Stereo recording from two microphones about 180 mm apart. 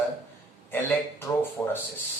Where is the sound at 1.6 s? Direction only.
15° left (ahead or behind).